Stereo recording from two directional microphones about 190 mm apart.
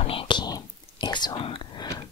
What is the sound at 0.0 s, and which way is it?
Whispering, 30° left (ahead or behind).